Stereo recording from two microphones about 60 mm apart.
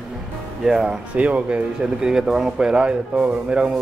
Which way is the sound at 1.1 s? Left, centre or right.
Right.